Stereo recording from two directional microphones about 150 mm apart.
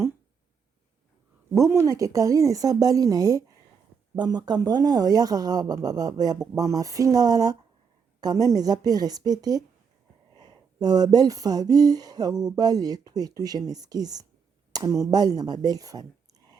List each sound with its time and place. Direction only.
1.5 s speech: 20° right (ahead or behind)